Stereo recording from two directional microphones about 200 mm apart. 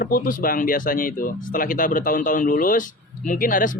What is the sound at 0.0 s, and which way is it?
Speech, 45° left (ahead or behind).